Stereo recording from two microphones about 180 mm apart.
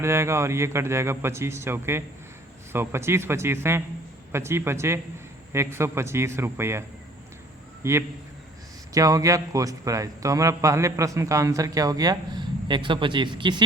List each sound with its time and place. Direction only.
0.0 s a man's voice: 15° right (ahead or behind)